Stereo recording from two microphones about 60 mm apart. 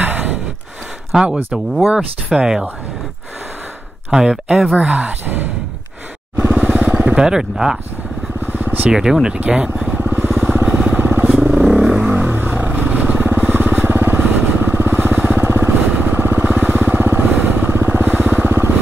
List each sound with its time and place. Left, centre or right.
0.0 s sigh: right
1.3 s speech: centre
4.1 s speech: centre
4.7 s speech: right
6.3 s vehicle: right
7.2 s speech: centre
8.5 s vehicle: right
8.9 s speech: centre
9.8 s vehicle: right
11.5 s vehicle: centre
12.1 s vehicle: right
16.4 s vehicle: right